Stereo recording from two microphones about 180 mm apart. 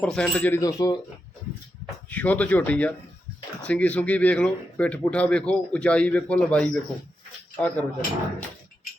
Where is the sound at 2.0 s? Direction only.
10° left (ahead or behind).